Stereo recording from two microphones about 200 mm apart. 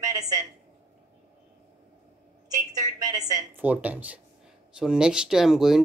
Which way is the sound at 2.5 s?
20° right (ahead or behind).